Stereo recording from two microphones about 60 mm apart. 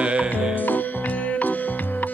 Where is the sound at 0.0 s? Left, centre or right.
Centre.